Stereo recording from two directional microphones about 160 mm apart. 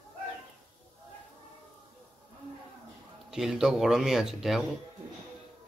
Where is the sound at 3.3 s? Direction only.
5° right (ahead or behind).